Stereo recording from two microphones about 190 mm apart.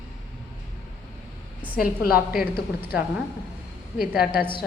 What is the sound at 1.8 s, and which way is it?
Speech, 50° left (ahead or behind).